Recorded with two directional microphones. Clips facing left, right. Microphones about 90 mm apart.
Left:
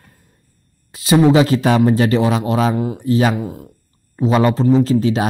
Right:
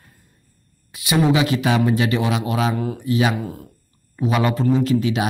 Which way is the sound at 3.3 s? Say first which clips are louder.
Left 3 dB; 20° left (ahead or behind).